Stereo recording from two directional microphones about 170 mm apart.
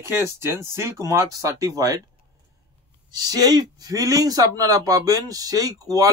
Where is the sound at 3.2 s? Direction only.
20° right (ahead or behind).